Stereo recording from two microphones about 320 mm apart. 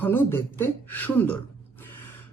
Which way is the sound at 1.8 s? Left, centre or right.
Centre.